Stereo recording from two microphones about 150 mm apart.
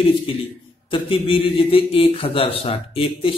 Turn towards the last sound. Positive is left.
turn(degrees=35)  # may be behind; listen again after turning